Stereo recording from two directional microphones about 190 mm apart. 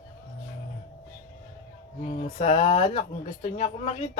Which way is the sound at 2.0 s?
35° left (ahead or behind).